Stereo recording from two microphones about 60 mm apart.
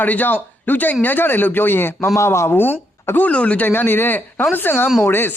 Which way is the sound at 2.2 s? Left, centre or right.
Left.